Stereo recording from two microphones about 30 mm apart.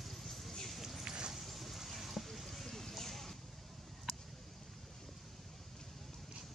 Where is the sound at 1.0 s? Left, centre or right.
Right.